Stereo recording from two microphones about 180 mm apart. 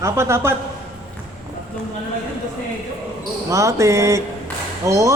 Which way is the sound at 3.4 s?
15° right (ahead or behind).